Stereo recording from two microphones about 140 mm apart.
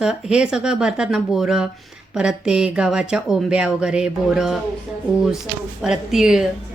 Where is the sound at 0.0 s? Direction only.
5° right (ahead or behind).